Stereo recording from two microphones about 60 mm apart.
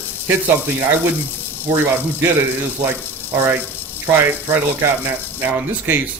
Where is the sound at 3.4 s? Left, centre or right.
Right.